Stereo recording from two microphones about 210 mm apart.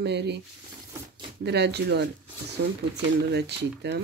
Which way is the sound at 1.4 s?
55° right (ahead or behind).